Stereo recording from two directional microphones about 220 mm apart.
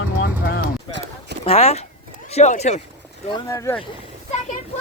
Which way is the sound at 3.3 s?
15° left (ahead or behind).